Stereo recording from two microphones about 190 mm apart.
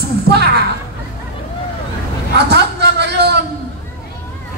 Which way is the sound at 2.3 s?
60° right (ahead or behind).